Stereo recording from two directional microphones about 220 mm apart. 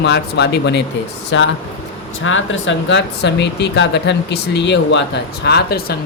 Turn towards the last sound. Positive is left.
turn(degrees=45)  # may be behind; listen again after turning